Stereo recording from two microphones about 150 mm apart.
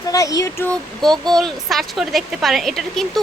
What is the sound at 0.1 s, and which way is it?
Speech, 25° left (ahead or behind).